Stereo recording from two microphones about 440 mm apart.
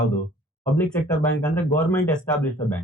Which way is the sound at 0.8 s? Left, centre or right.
Centre.